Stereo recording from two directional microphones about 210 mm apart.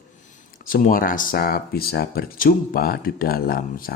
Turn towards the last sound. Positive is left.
turn(degrees=45)  # may be behind; listen again after turning